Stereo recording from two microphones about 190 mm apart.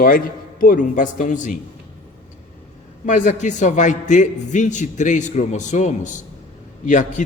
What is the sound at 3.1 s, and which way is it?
A man's voice, 40° left (ahead or behind).